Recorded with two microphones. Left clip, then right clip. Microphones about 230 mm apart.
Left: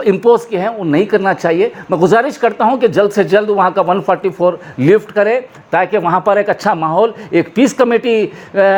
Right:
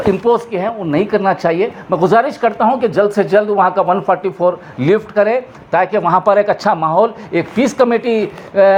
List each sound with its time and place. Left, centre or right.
0.0 s speech: left